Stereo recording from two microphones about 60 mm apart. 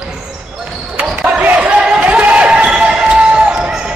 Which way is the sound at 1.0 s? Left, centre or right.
Right.